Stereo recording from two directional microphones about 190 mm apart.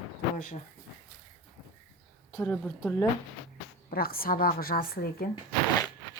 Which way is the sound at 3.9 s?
50° left (ahead or behind).